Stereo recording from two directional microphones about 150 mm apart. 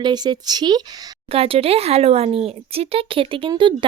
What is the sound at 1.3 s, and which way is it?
Speech, 40° right (ahead or behind).